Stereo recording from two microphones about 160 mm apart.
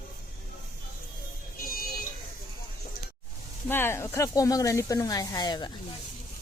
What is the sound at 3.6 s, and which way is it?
Speech, 15° left (ahead or behind).